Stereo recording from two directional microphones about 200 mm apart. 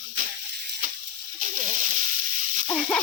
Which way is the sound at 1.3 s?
40° right (ahead or behind).